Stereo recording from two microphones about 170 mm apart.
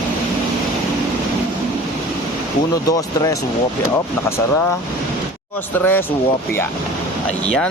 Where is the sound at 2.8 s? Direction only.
20° left (ahead or behind).